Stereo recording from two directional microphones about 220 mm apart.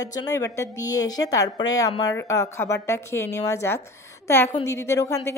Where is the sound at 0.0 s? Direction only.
15° left (ahead or behind).